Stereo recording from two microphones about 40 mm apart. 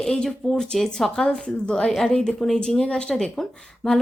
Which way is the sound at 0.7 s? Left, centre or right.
Centre.